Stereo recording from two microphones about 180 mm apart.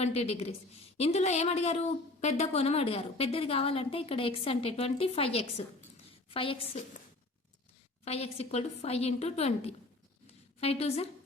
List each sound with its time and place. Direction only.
0.0 s a woman's voice: 35° left (ahead or behind)
8.0 s a woman's voice: 35° left (ahead or behind)